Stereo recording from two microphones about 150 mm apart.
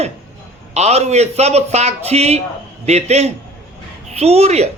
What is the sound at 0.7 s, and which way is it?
A woman's voice, 45° right (ahead or behind).